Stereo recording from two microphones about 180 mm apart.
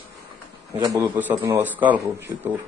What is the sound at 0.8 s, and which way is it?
A man's voice, 20° right (ahead or behind).